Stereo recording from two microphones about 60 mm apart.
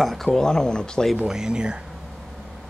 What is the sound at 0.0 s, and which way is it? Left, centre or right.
Speech, centre.